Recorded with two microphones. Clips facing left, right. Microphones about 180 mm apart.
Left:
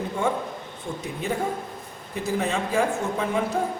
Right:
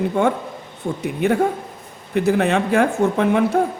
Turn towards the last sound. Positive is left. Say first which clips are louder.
# right 8 dB
turn(degrees=-65)  # may be behind; listen again after turning